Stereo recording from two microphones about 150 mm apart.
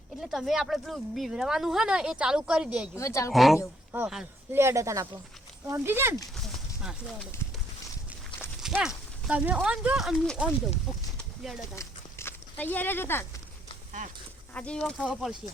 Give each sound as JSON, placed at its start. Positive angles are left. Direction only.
{"t": 0.2, "sound": "speech", "side_deg": 0}
{"t": 2.9, "sound": "speech", "side_deg": 20}
{"t": 3.3, "sound": "speech", "side_deg": 0}
{"t": 3.9, "sound": "speech", "side_deg": -15}
{"t": 6.3, "sound": "a sound", "side_deg": 0}
{"t": 8.6, "sound": "a sound", "side_deg": -5}
{"t": 9.2, "sound": "speech", "side_deg": -10}
{"t": 11.7, "sound": "a sound", "side_deg": 15}
{"t": 14.5, "sound": "speech", "side_deg": 10}